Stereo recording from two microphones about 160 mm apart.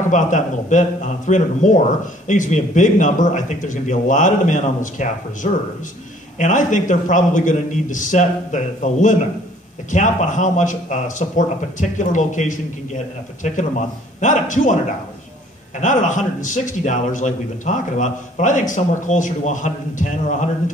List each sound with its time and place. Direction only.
0.1 s a man's voice: 50° left (ahead or behind)
15.8 s a man's voice: 50° left (ahead or behind)